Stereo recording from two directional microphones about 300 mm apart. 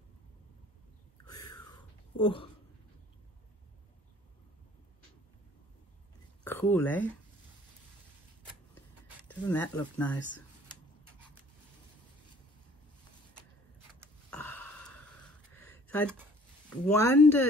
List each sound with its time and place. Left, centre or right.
1.5 s whispering: centre
6.4 s speech: centre
9.3 s speech: centre
14.3 s a sound: centre
16.6 s speech: centre